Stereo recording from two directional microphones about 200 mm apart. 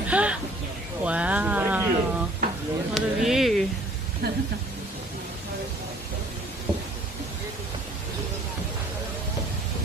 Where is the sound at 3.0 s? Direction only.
Centre (ahead or behind).